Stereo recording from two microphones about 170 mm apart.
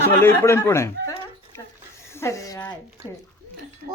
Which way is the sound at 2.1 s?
15° left (ahead or behind).